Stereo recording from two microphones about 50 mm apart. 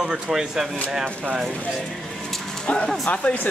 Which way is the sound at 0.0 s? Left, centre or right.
Centre.